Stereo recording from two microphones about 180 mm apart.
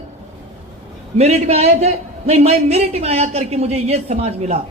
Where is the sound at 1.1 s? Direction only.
35° right (ahead or behind).